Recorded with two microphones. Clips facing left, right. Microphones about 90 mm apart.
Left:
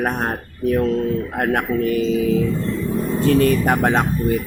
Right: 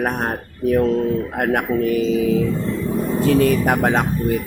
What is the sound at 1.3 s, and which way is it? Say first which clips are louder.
Speech: right 1 dB; 5° right (ahead or behind).